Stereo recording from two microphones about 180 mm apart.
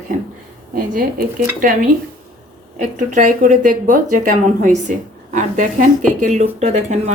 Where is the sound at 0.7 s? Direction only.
50° right (ahead or behind).